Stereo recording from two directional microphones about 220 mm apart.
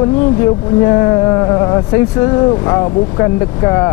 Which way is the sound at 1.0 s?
15° left (ahead or behind).